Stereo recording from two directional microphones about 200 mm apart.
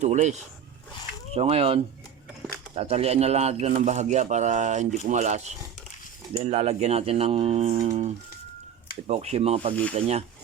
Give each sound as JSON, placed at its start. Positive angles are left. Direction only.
{"t": 0.0, "sound": "speech", "side_deg": -35}